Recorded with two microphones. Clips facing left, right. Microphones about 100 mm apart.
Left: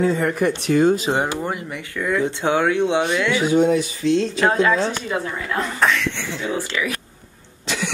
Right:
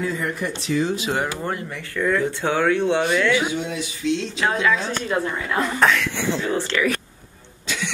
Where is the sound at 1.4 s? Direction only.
10° left (ahead or behind).